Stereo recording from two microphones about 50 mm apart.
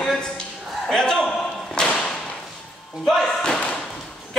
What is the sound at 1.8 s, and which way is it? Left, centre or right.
Whip, centre.